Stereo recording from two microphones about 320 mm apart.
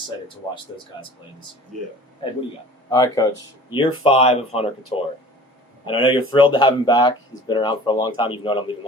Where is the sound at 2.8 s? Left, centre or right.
Centre.